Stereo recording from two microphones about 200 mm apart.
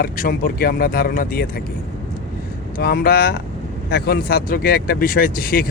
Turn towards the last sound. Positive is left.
turn(degrees=50)  # may be behind; listen again after turning